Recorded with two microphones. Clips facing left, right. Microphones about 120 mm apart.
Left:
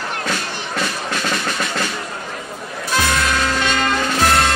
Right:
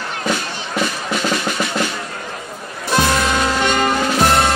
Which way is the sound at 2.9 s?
15° right (ahead or behind).